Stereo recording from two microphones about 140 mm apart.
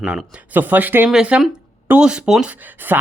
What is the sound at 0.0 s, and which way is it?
Speech, 5° right (ahead or behind).